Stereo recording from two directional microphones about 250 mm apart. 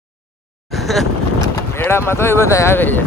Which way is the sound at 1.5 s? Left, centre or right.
Centre.